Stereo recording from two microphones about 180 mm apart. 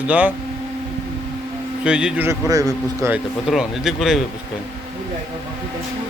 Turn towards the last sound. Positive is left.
turn(degrees=-5)  # may be behind; listen again after turning